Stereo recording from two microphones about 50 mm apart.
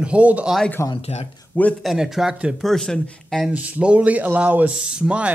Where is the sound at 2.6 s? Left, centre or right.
Centre.